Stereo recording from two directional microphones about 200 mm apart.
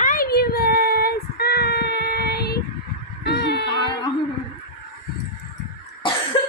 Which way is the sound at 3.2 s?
55° left (ahead or behind).